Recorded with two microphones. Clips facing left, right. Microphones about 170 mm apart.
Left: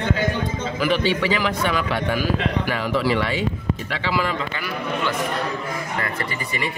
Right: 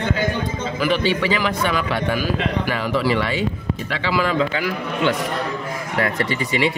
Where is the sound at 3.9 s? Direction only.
90° right.